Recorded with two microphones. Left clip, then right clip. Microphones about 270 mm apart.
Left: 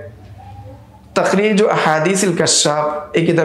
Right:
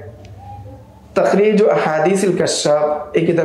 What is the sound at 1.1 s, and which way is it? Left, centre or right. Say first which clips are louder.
Speech: right 1 dB; left.